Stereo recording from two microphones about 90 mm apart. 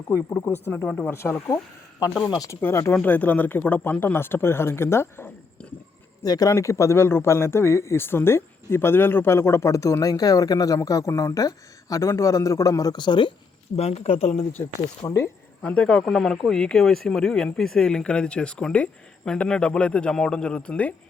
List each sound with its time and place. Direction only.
0.1 s speech: 30° left (ahead or behind)
0.9 s speech: 15° left (ahead or behind)
1.1 s speech: 30° left (ahead or behind)
6.2 s speech: 45° left (ahead or behind)
6.5 s speech: 35° left (ahead or behind); by 13.3 s 60° left (ahead or behind)
14.6 s speech: 30° left (ahead or behind)
15.6 s speech: 15° left (ahead or behind)